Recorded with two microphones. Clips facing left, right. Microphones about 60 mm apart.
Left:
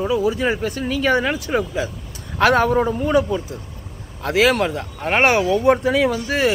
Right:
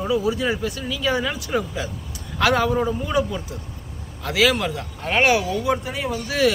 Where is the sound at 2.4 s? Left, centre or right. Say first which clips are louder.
Left 4 dB; left.